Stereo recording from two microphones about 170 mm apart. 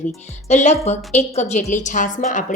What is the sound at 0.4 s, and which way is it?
Speech, 40° left (ahead or behind).